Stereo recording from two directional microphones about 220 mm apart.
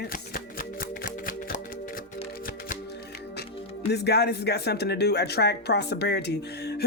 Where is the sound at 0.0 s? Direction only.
40° left (ahead or behind).